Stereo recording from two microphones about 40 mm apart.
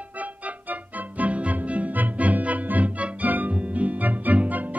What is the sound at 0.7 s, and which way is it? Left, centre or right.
Music, right.